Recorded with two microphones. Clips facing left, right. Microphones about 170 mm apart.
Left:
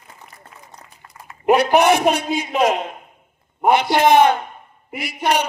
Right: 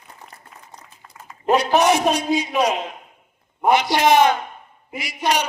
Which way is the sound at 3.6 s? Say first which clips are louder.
Left 2 dB; 55° left (ahead or behind).